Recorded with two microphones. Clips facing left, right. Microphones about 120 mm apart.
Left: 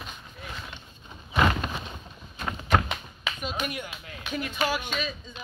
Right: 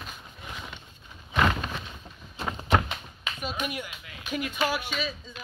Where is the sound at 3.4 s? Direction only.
5° right (ahead or behind).